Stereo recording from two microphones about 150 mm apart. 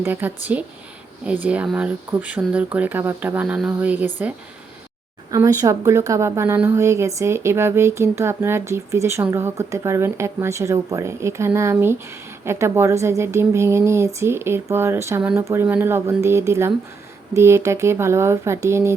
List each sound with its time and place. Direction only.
0.0 s speech: 15° right (ahead or behind)
5.3 s speech: 20° right (ahead or behind)